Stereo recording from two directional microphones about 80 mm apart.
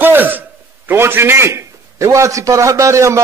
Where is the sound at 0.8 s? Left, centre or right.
Right.